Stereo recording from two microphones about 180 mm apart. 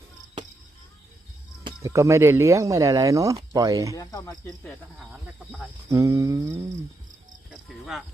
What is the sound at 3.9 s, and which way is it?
Speech, 20° left (ahead or behind).